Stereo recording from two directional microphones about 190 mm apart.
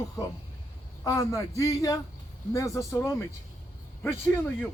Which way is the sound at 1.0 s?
20° left (ahead or behind).